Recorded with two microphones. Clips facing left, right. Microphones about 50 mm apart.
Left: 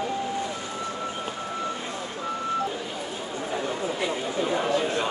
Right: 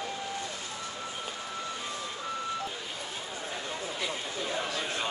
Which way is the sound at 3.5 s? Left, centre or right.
Left.